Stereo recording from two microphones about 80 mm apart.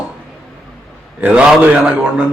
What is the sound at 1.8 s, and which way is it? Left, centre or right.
Speech, centre.